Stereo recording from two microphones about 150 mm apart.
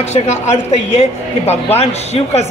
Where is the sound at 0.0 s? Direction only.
50° left (ahead or behind).